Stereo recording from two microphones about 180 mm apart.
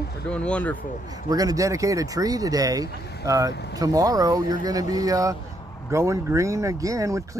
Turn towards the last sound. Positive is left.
turn(degrees=-15)  # may be behind; listen again after turning